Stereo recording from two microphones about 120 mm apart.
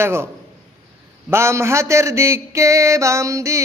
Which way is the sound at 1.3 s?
20° right (ahead or behind).